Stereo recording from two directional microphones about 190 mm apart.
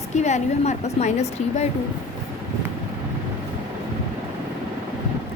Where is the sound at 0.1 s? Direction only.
40° left (ahead or behind).